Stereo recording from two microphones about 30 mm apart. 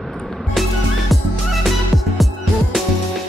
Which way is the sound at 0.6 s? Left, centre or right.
Centre.